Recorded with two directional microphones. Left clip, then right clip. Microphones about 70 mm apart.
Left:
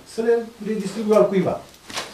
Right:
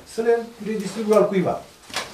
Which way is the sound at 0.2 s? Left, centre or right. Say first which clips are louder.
Even; centre.